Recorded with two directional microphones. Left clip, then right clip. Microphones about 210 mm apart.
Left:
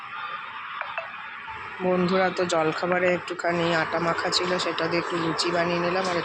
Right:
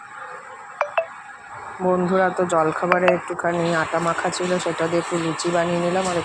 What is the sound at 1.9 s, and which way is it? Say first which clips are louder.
Speech: right 4 dB; 5° right (ahead or behind).